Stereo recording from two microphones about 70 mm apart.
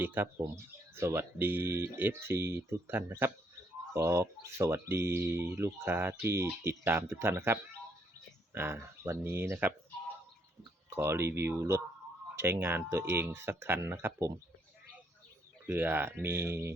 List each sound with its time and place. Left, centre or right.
0.0 s speech: right
0.4 s speech: right
3.9 s speech: right
9.0 s speech: right
10.8 s speech: right
12.5 s speech: right
15.6 s speech: right